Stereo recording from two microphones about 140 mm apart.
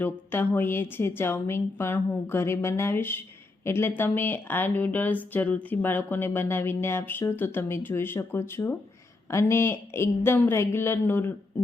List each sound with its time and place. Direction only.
0.0 s a woman's voice: 15° left (ahead or behind)